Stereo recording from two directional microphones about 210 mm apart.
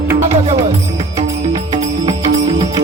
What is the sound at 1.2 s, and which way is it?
Music, 20° right (ahead or behind).